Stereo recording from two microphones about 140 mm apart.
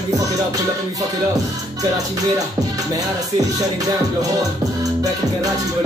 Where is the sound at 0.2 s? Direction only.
25° right (ahead or behind).